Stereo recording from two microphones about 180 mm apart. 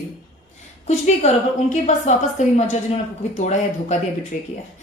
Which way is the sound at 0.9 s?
40° left (ahead or behind).